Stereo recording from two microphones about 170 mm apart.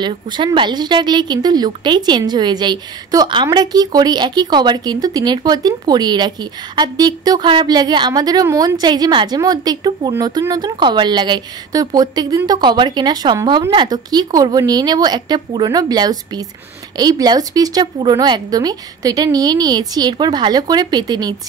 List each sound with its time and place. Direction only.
0.0 s speech: 30° right (ahead or behind)